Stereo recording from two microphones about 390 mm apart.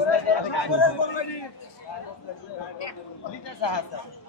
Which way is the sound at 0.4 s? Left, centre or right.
Left.